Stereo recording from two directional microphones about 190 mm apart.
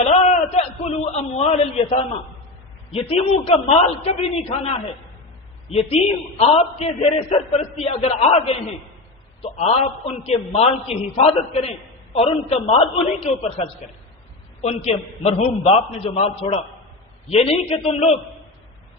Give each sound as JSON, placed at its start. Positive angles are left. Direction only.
{"t": 0.0, "sound": "a sound", "side_deg": 35}
{"t": 2.9, "sound": "a man's voice", "side_deg": 35}
{"t": 5.7, "sound": "a man's voice", "side_deg": 35}